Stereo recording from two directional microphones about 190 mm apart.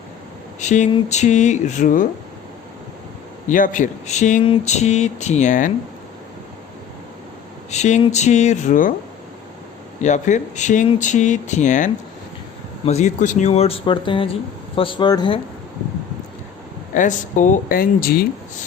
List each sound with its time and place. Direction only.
0.6 s speech: 40° left (ahead or behind)
3.5 s speech: 45° left (ahead or behind)
7.7 s speech: 35° left (ahead or behind)
10.0 s speech: 40° left (ahead or behind); by 15.4 s 25° left (ahead or behind)
16.9 s speech: 40° left (ahead or behind)